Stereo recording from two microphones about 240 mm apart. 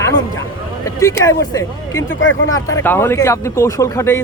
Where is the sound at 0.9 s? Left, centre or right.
Centre.